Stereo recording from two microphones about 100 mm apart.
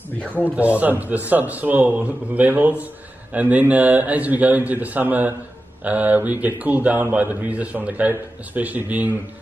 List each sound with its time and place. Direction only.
0.4 s a man's voice: 15° right (ahead or behind)